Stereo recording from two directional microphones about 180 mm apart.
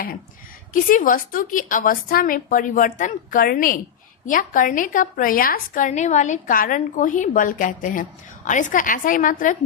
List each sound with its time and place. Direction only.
0.7 s a woman's voice: 50° left (ahead or behind)